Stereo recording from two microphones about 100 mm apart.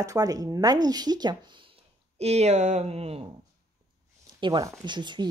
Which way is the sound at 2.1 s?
90° right.